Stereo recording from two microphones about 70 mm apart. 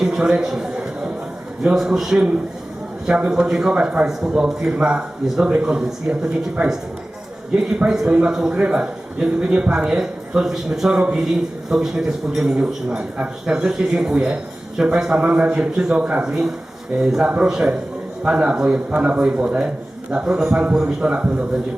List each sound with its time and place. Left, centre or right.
0.0 s a man's voice: centre